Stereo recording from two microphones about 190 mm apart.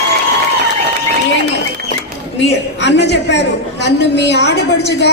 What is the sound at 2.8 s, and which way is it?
A woman's voice, 65° left (ahead or behind).